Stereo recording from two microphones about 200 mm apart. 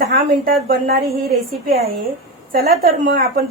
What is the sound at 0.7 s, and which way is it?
Speech, 50° right (ahead or behind).